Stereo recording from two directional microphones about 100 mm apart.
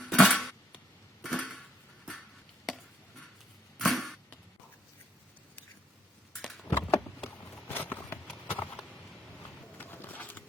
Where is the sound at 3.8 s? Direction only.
Centre (ahead or behind).